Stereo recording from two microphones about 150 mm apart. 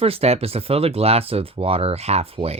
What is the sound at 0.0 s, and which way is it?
Speech, 40° right (ahead or behind).